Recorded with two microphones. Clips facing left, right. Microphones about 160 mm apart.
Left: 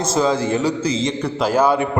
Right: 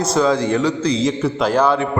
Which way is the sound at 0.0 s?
Centre (ahead or behind).